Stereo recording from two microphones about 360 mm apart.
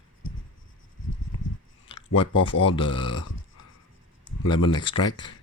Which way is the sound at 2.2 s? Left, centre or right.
Centre.